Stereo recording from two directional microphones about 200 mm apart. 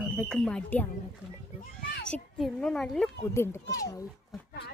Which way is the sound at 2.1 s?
5° left (ahead or behind).